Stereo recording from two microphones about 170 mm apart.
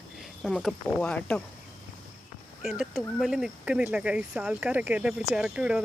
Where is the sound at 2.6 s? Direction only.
Centre (ahead or behind).